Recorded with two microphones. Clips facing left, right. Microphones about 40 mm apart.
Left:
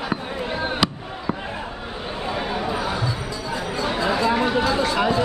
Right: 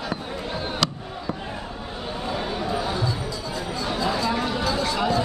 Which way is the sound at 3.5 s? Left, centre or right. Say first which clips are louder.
Left 5 dB; left.